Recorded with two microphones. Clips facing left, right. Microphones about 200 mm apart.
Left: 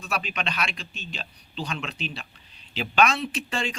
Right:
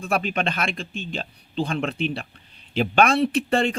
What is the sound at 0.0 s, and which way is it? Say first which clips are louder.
A man's voice: right 7 dB; 50° right (ahead or behind).